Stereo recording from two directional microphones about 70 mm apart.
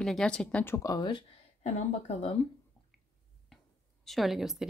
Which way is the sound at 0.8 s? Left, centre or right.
Left.